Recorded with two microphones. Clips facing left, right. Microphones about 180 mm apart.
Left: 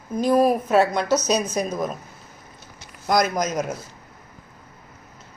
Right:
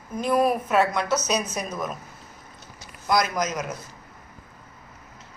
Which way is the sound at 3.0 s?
45° left (ahead or behind).